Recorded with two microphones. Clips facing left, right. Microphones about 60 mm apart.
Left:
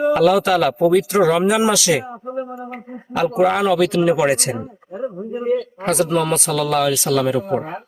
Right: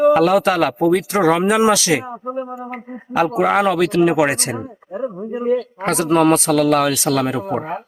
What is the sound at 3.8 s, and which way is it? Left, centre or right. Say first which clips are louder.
Speech: right 1 dB; right.